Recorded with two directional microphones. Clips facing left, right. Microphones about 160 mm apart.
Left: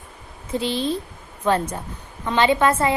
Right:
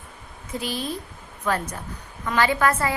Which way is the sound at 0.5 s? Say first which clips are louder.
Left 6 dB; 25° left (ahead or behind).